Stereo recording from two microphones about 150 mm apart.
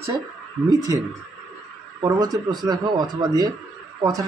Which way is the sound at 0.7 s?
25° right (ahead or behind).